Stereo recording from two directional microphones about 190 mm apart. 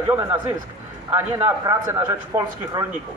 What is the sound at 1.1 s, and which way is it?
Speech, 15° right (ahead or behind).